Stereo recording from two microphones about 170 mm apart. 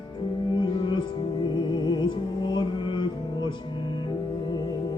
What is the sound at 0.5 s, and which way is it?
Music, 25° left (ahead or behind).